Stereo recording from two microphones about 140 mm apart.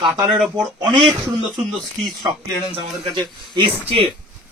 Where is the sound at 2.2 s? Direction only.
35° right (ahead or behind).